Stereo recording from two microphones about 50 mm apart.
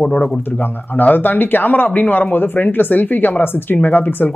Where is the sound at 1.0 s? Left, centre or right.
Left.